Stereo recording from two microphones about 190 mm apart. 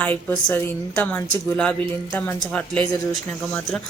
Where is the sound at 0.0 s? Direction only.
10° left (ahead or behind).